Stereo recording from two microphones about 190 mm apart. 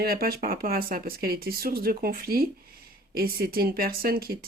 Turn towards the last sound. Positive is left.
turn(degrees=-50)  # may be behind; listen again after turning